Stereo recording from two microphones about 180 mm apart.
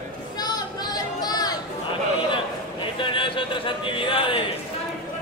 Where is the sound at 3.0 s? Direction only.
30° left (ahead or behind).